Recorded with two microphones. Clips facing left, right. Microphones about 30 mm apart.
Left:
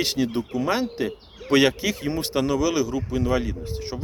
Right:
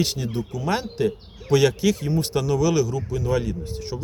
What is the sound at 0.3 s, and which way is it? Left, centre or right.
Speech, left.